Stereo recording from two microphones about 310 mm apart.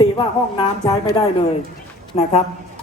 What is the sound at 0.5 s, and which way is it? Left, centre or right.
A woman's voice, centre.